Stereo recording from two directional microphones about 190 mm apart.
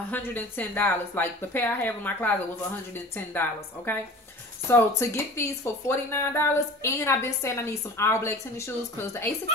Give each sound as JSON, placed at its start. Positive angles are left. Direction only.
{"t": 0.1, "sound": "speech", "side_deg": 10}
{"t": 3.3, "sound": "speech", "side_deg": 10}